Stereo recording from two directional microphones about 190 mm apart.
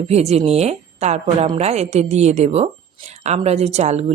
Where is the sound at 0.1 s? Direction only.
35° right (ahead or behind).